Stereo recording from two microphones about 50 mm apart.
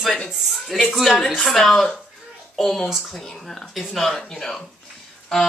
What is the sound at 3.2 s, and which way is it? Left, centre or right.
Speech, centre.